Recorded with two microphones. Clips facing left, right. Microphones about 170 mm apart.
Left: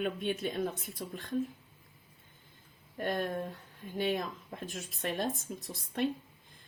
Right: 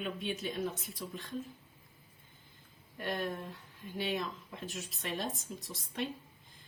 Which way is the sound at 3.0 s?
50° left (ahead or behind).